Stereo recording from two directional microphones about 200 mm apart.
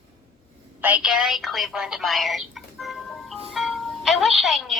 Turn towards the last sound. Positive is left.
turn(degrees=0)  # may be behind; listen again after turning